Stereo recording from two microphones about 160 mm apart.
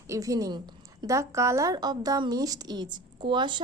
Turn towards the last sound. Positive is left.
turn(degrees=-30)  # may be behind; listen again after turning